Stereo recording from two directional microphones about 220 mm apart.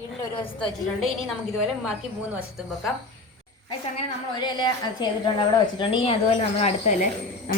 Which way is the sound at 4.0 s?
20° left (ahead or behind).